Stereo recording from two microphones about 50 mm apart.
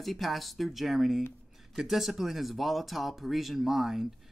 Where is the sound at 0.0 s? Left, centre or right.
Centre.